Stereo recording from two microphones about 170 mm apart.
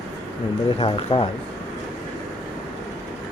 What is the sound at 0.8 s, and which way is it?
Speech, 35° left (ahead or behind).